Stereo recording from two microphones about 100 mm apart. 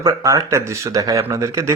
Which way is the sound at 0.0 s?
35° right (ahead or behind).